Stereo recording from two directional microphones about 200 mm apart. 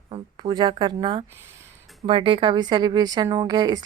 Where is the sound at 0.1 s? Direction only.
20° right (ahead or behind).